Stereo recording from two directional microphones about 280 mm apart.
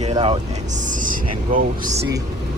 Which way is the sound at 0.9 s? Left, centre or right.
Right.